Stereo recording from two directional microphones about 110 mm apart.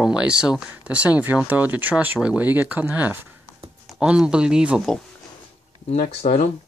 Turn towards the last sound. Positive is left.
turn(degrees=90)